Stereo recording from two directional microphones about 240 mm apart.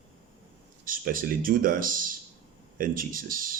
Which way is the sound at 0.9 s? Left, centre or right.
Right.